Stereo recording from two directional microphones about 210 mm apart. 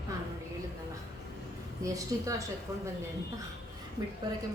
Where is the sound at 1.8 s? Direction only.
15° right (ahead or behind).